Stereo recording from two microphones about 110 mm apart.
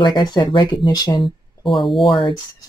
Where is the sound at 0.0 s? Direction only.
40° left (ahead or behind).